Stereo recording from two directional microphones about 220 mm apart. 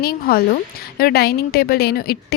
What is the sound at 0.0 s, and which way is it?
A woman's voice, 45° left (ahead or behind).